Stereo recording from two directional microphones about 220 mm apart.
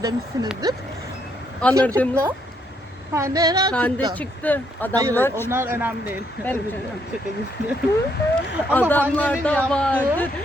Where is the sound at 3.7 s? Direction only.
5° left (ahead or behind).